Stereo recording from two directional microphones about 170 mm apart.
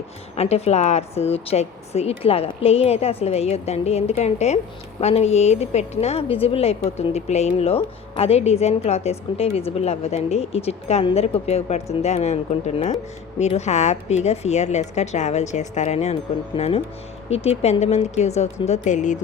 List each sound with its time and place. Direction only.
0.3 s a woman's voice: 40° left (ahead or behind)